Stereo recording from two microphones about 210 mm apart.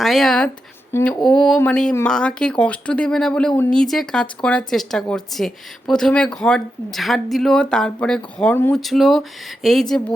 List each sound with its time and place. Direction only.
0.0 s speech: centre (ahead or behind)